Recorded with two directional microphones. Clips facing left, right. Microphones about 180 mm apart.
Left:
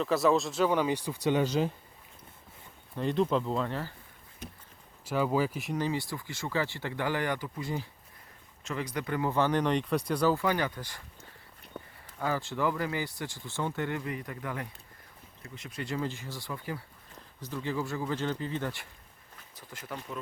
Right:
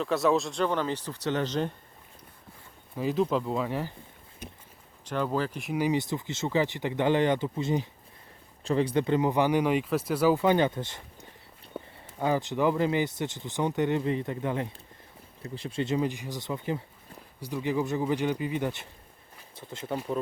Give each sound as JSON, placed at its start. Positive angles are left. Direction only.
{"t": 0.0, "sound": "speech", "side_deg": 0}
{"t": 2.9, "sound": "speech", "side_deg": -5}
{"t": 5.0, "sound": "speech", "side_deg": 5}
{"t": 5.7, "sound": "speech", "side_deg": -15}
{"t": 10.3, "sound": "a sound", "side_deg": -20}
{"t": 12.2, "sound": "speech", "side_deg": -20}